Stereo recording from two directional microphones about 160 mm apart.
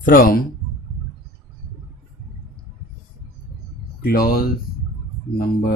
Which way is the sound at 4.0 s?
70° left (ahead or behind).